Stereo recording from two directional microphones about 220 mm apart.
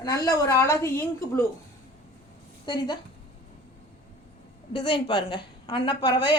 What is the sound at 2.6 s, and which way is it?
Speech, 20° left (ahead or behind).